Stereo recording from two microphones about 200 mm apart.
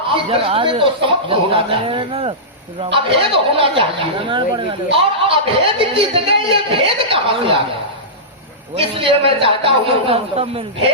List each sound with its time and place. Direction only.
0.1 s a man's voice: 25° right (ahead or behind)
8.7 s a man's voice: 30° right (ahead or behind)